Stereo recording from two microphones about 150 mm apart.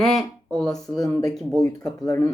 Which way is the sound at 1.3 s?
Centre (ahead or behind).